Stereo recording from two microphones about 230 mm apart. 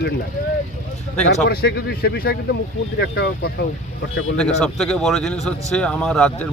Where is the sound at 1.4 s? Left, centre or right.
Left.